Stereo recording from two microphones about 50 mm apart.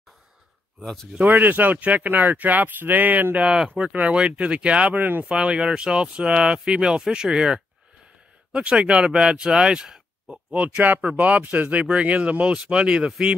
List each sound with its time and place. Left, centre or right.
1.1 s speech: right
4.9 s speech: right
5.2 s speech: right
10.5 s speech: right